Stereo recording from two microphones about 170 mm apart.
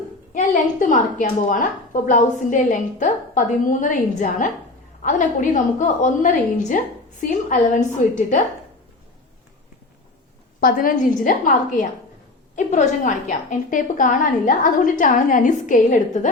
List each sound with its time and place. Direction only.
0.3 s a woman's voice: 50° left (ahead or behind)
5.0 s a woman's voice: 50° left (ahead or behind)
10.6 s a woman's voice: 55° left (ahead or behind)